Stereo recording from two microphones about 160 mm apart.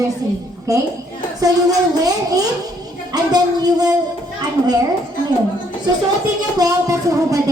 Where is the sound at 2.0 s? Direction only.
25° right (ahead or behind).